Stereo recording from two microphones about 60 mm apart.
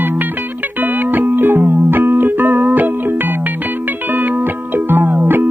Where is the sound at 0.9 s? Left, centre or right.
Right.